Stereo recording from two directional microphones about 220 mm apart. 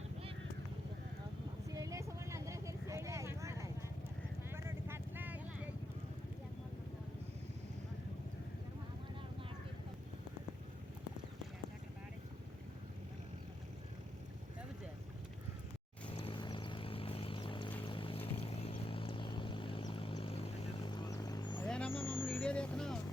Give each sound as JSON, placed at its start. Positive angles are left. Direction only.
{"t": 1.7, "sound": "vehicle", "side_deg": -15}
{"t": 16.0, "sound": "vehicle", "side_deg": 25}
{"t": 21.6, "sound": "vehicle", "side_deg": 5}